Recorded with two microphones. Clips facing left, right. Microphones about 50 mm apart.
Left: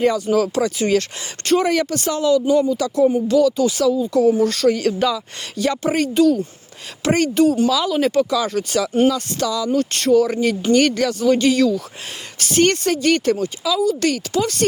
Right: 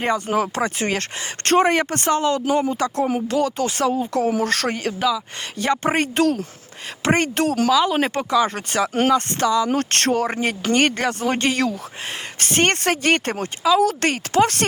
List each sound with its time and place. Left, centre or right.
0.0 s speech: right
4.9 s speech: centre
5.5 s speech: right
6.1 s speech: right
7.0 s speech: right
7.3 s speech: right
7.7 s speech: right
9.6 s speech: right